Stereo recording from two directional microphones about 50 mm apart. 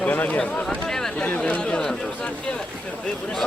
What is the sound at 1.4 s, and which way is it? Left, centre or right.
Speech, left.